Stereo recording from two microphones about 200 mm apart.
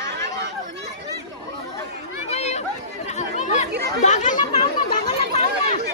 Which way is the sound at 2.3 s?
35° left (ahead or behind).